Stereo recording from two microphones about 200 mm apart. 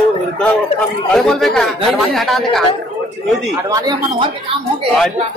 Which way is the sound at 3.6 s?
20° right (ahead or behind).